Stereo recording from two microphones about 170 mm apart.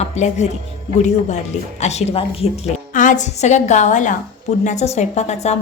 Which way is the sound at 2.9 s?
50° left (ahead or behind).